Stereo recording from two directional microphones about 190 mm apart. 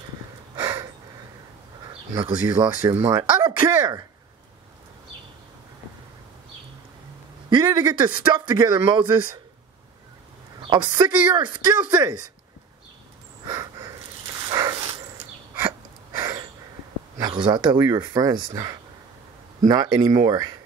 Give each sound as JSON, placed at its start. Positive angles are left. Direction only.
{"t": 0.6, "sound": "gasp", "side_deg": -25}
{"t": 2.1, "sound": "speech", "side_deg": -25}
{"t": 7.7, "sound": "speech", "side_deg": -25}
{"t": 10.6, "sound": "speech", "side_deg": -25}
{"t": 13.5, "sound": "a sound", "side_deg": -20}
{"t": 14.5, "sound": "dog", "side_deg": -25}
{"t": 15.5, "sound": "a sound", "side_deg": -10}
{"t": 17.2, "sound": "speech", "side_deg": -25}